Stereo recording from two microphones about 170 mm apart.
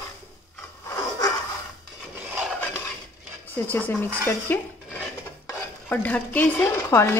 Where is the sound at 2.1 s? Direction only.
10° right (ahead or behind).